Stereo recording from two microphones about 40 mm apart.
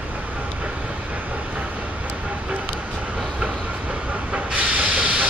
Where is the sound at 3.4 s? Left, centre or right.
Right.